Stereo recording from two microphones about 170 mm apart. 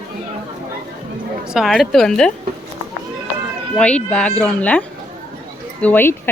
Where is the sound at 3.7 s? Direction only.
5° left (ahead or behind).